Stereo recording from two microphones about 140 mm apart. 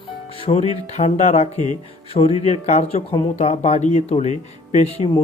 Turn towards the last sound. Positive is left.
turn(degrees=45)  # may be behind; listen again after turning